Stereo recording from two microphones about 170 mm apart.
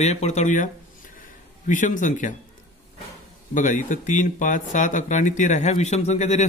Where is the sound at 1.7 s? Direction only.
50° left (ahead or behind).